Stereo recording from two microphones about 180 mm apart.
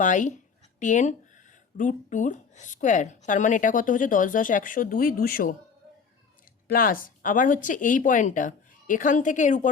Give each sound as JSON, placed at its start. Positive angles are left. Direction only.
{"t": 0.0, "sound": "speech", "side_deg": 45}
{"t": 6.7, "sound": "speech", "side_deg": 50}